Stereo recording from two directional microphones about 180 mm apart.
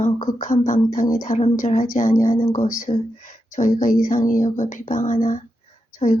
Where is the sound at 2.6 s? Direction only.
40° left (ahead or behind).